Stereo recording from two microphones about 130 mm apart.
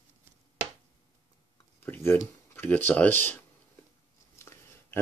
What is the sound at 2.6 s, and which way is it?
Speech, 15° left (ahead or behind).